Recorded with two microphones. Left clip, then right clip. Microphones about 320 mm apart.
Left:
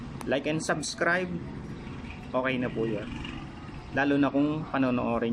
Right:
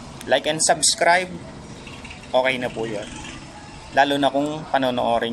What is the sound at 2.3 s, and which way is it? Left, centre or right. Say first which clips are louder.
Speech: right 9 dB; right.